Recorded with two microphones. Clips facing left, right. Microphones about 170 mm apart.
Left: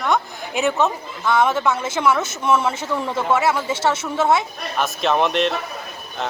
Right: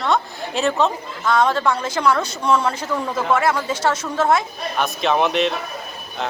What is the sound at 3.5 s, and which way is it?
Speech, 10° left (ahead or behind).